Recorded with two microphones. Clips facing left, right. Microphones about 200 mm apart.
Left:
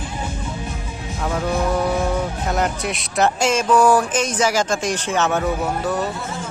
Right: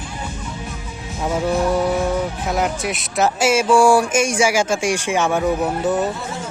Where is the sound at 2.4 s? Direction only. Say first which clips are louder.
Right 1 dB; 5° right (ahead or behind).